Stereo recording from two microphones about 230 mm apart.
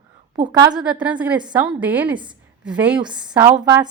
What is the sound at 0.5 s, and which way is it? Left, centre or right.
Speech, centre.